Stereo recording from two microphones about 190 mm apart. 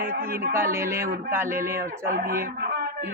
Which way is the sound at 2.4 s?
55° right (ahead or behind).